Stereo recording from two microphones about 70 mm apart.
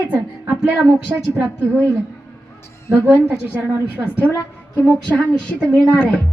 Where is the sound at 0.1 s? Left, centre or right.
Right.